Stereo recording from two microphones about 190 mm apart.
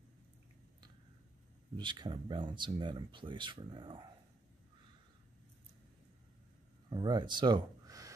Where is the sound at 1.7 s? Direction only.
25° right (ahead or behind).